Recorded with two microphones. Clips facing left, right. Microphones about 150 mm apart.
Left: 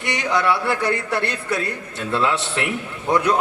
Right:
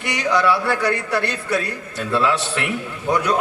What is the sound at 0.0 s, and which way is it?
A man's voice, 25° left (ahead or behind).